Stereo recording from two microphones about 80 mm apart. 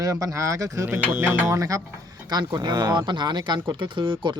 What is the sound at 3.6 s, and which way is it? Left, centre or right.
Speech, right.